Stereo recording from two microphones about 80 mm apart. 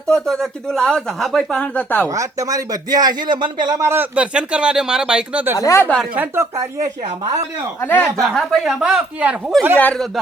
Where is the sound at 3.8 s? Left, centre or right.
Right.